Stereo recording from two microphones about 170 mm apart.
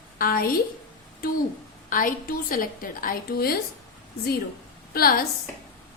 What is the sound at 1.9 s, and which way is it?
A woman's voice, 55° left (ahead or behind).